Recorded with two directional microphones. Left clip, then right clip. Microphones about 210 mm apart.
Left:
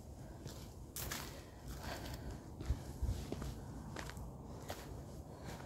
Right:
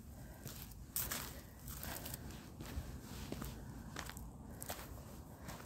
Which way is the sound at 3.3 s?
60° right (ahead or behind).